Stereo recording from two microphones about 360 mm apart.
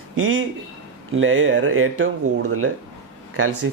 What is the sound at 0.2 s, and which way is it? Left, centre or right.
Speech, right.